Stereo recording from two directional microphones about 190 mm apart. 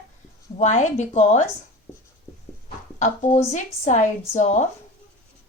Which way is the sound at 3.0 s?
40° left (ahead or behind).